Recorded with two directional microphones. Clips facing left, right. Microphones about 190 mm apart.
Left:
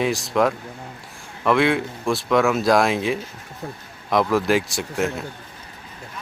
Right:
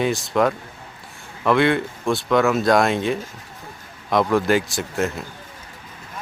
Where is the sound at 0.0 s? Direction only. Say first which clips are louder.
Even; centre (ahead or behind).